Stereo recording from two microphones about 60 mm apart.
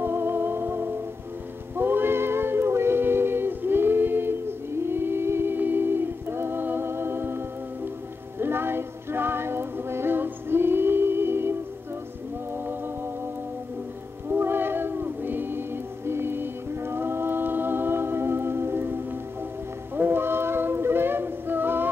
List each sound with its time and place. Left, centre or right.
0.0 s music: right
4.8 s a capella: right
8.4 s music: right
14.3 s cat: right
16.1 s music: right
20.0 s a sound: right